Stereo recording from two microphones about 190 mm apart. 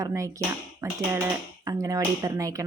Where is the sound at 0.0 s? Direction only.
15° right (ahead or behind).